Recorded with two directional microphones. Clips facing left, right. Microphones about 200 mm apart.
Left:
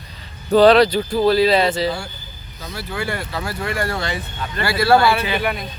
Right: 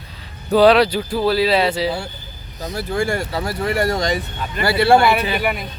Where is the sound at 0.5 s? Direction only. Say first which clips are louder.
Left 1 dB; 10° right (ahead or behind).